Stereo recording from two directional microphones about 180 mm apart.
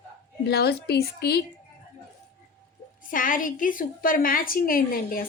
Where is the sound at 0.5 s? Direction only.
65° left (ahead or behind).